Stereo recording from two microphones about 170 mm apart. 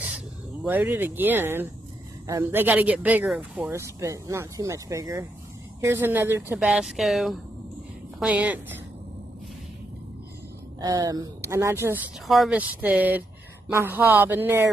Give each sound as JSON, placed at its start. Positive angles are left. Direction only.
{"t": 0.7, "sound": "speech", "side_deg": -10}
{"t": 6.6, "sound": "speech", "side_deg": 0}
{"t": 10.8, "sound": "speech", "side_deg": -25}
{"t": 12.3, "sound": "speech", "side_deg": -5}